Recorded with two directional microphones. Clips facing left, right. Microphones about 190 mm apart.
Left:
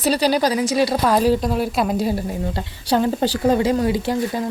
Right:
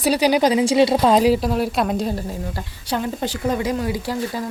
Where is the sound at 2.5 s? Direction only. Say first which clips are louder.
Left 5 dB; 30° left (ahead or behind).